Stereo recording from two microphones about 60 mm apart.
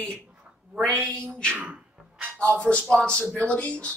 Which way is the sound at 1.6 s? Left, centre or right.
Centre.